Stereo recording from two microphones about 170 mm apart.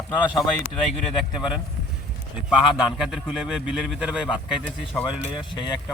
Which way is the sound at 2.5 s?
5° right (ahead or behind).